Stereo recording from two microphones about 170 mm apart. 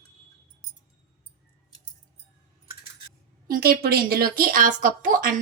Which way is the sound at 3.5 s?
65° right (ahead or behind).